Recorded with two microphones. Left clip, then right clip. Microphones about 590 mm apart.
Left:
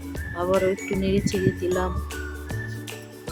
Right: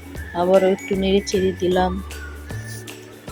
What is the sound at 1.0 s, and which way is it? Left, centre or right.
Speech, left.